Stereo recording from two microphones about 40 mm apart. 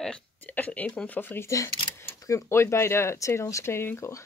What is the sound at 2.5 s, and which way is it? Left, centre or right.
Speech, left.